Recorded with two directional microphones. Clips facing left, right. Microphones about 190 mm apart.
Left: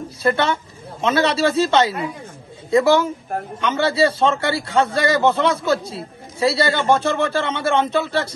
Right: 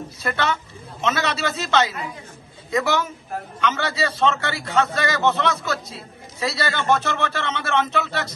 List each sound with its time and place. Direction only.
0.2 s a man's voice: 30° left (ahead or behind)